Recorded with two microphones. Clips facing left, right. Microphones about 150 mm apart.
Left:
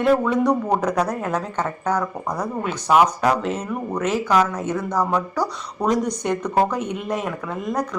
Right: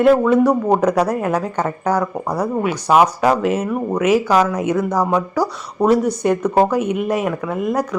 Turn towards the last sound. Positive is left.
turn(degrees=-5)  # may be behind; listen again after turning